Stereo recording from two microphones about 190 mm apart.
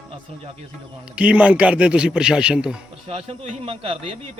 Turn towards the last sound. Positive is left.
turn(degrees=-30)  # may be behind; listen again after turning